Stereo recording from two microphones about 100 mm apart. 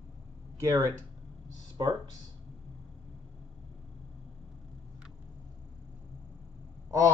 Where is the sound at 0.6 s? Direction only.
35° right (ahead or behind).